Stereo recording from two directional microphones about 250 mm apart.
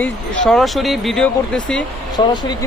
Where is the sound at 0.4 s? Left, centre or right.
Centre.